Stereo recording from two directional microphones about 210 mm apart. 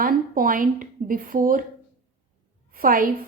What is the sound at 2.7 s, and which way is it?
Speech, 45° right (ahead or behind).